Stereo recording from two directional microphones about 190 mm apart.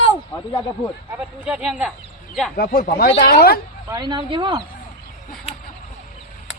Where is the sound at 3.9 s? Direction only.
25° right (ahead or behind).